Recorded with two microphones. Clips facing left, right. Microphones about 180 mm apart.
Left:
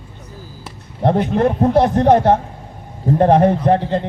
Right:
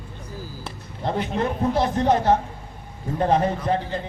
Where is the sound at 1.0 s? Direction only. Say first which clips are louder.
Left 9 dB; 55° left (ahead or behind).